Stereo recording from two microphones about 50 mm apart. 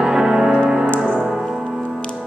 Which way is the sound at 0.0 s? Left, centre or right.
Centre.